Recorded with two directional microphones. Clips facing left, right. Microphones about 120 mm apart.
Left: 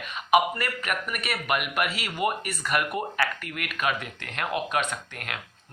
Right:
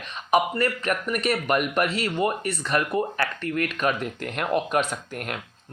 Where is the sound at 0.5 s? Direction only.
35° right (ahead or behind).